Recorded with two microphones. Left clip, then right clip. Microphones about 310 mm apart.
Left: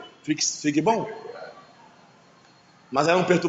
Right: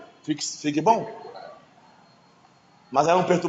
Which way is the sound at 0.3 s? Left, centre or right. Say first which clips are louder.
Left 3 dB; centre.